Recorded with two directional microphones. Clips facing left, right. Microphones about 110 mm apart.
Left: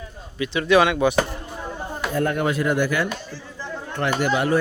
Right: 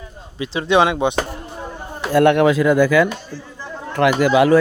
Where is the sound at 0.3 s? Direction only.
25° right (ahead or behind).